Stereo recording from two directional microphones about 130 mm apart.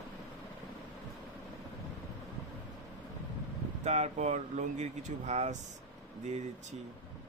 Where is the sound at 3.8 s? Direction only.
60° right (ahead or behind).